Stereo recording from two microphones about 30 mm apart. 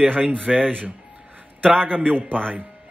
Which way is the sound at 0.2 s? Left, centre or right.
Right.